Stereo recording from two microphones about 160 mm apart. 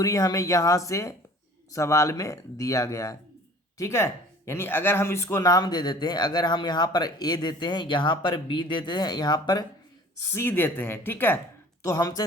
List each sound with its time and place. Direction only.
0.0 s speech: 20° left (ahead or behind)
10.3 s speech: 15° left (ahead or behind)